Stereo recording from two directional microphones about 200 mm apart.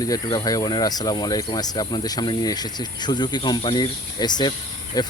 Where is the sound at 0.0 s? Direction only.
20° left (ahead or behind).